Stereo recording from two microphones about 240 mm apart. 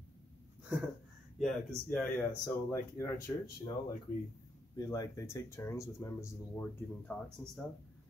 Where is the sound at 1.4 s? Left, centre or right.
Centre.